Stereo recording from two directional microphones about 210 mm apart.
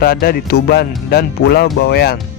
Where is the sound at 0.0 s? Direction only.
45° left (ahead or behind).